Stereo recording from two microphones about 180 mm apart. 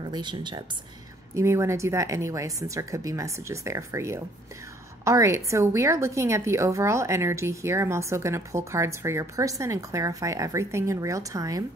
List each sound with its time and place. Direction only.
0.1 s speech: 25° right (ahead or behind)
1.3 s a woman's voice: 15° right (ahead or behind)